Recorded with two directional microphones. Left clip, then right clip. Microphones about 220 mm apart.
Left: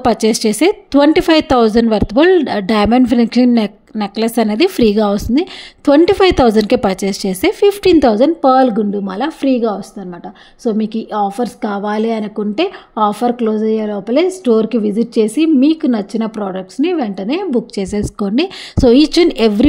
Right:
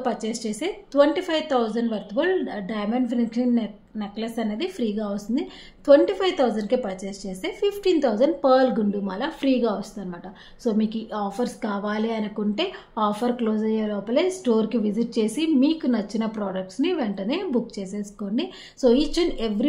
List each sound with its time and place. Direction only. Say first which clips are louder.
0.0 s a woman's voice: left 14 dB; 45° left (ahead or behind)